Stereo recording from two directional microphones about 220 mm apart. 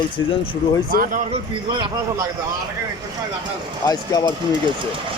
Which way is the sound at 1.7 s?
20° right (ahead or behind).